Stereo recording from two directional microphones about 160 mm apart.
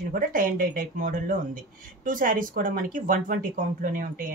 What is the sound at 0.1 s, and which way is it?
Speech, 60° right (ahead or behind).